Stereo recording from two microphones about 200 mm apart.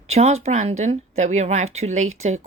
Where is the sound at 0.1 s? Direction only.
35° right (ahead or behind).